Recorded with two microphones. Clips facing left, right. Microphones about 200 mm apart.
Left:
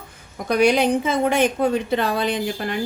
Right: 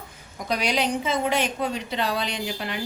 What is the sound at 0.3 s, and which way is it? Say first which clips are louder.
A woman's voice: left 8 dB; 55° left (ahead or behind).